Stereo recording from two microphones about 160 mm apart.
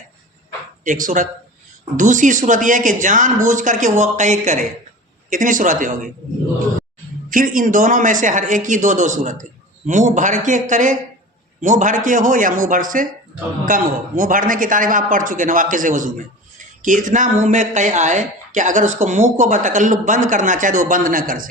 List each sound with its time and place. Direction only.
0.9 s speech: 55° right (ahead or behind)
7.3 s speech: 60° right (ahead or behind)